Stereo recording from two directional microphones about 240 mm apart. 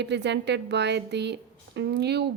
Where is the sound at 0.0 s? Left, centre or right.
Right.